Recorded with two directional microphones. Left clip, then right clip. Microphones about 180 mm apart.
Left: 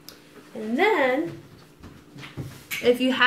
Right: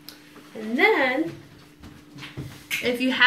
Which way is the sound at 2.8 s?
50° left (ahead or behind).